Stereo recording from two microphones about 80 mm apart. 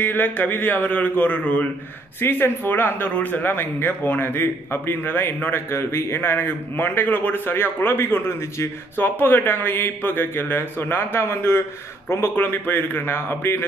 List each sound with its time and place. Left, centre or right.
0.0 s speech: left